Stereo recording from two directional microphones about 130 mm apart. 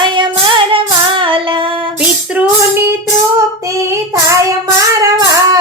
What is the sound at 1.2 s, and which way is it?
Child singing, 40° right (ahead or behind).